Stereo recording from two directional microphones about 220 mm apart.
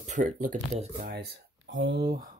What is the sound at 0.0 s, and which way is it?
Speech, 35° right (ahead or behind).